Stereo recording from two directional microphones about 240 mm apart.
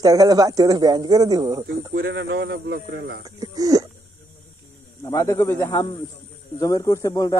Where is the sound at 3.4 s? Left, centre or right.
Centre.